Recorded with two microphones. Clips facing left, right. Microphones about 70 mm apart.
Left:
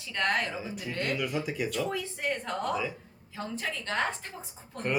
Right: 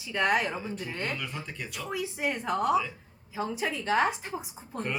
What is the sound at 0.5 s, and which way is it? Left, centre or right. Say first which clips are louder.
Speech: right 2 dB; centre.